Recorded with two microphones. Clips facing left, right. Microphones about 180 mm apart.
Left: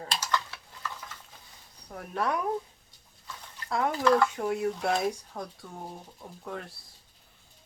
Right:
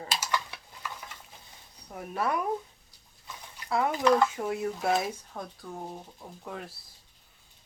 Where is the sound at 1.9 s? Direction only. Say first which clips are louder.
Even; 5° right (ahead or behind).